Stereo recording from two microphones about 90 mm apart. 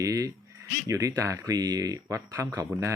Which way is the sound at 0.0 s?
40° right (ahead or behind).